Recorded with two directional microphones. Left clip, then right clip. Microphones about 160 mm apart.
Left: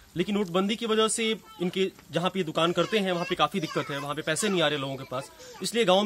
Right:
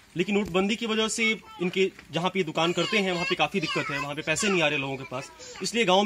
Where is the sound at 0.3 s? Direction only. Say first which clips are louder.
Right 2 dB; 20° left (ahead or behind).